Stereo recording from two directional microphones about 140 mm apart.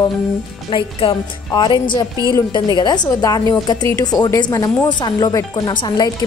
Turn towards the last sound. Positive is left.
turn(degrees=30)  # may be behind; listen again after turning